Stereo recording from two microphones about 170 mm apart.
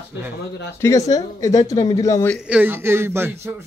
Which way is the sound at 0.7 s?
20° left (ahead or behind).